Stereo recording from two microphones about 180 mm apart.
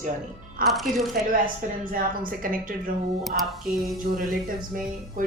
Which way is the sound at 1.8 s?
50° right (ahead or behind).